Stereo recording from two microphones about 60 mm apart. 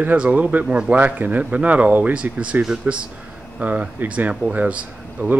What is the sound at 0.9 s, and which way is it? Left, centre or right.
Speech, right.